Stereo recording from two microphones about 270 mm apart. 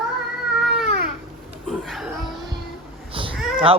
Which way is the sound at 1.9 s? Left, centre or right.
Centre.